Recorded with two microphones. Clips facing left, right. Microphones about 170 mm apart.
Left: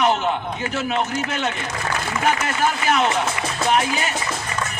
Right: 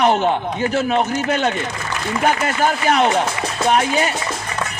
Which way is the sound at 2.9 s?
35° right (ahead or behind).